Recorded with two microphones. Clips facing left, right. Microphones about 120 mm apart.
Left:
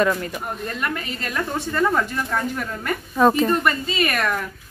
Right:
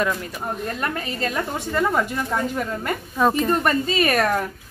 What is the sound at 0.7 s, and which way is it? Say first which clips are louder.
Speech: right 1 dB; 30° right (ahead or behind).